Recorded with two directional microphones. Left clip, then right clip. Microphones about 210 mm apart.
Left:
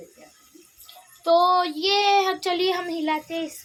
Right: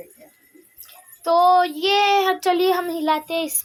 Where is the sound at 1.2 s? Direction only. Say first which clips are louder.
Right 3 dB; 15° right (ahead or behind).